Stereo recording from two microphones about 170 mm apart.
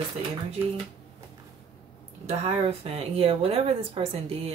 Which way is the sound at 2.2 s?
35° right (ahead or behind).